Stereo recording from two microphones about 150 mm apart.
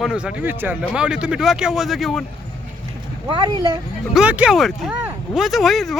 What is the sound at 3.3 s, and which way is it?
Speech, 30° right (ahead or behind).